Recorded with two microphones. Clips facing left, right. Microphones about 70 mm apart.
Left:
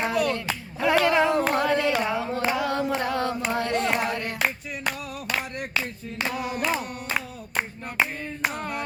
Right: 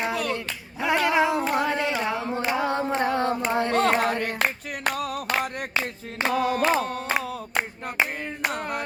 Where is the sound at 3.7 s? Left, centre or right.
Right.